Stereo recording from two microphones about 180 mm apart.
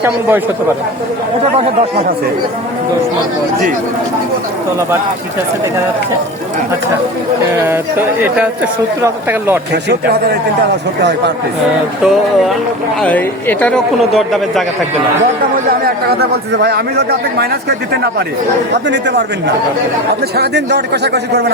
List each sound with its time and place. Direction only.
0.0 s speech: 15° right (ahead or behind)
1.5 s speech: 35° right (ahead or behind)
9.0 s speech: 15° right (ahead or behind)
9.9 s a man's voice: 65° right (ahead or behind)
12.0 s speech: centre (ahead or behind)
16.0 s a man's voice: 65° right (ahead or behind)
18.9 s a man's voice: 70° right (ahead or behind)
20.3 s a man's voice: 65° right (ahead or behind)